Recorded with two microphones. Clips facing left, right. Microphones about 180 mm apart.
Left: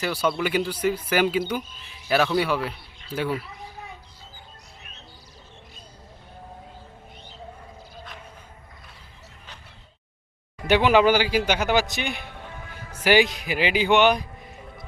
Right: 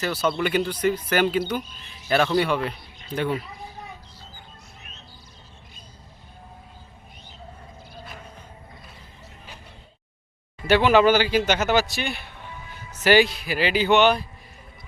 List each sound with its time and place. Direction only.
0.0 s speech: 10° left (ahead or behind)
3.1 s speech: 25° right (ahead or behind)
10.7 s speech: 15° left (ahead or behind)
12.2 s music: 55° left (ahead or behind)
13.0 s speech: 15° left (ahead or behind)